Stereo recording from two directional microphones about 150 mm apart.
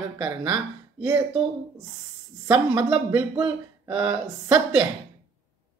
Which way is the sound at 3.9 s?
25° right (ahead or behind).